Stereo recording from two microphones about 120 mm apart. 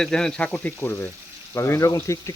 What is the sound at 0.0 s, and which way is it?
Frying, 5° left (ahead or behind).